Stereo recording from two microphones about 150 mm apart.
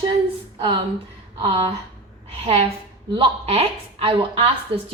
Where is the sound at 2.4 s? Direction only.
45° right (ahead or behind).